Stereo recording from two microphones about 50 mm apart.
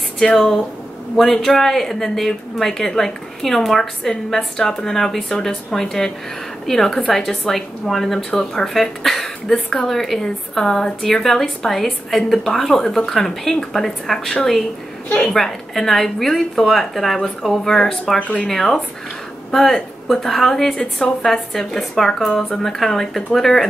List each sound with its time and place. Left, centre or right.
0.2 s a woman's voice: centre
18.2 s speech: left
18.5 s a woman's voice: centre